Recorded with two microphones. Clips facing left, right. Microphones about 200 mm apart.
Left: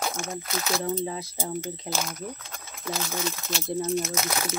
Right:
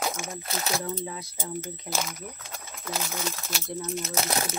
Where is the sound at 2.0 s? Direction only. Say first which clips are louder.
Left 2 dB; 5° right (ahead or behind).